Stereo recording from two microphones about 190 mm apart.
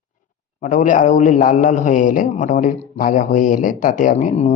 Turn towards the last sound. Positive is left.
turn(degrees=35)  # may be behind; listen again after turning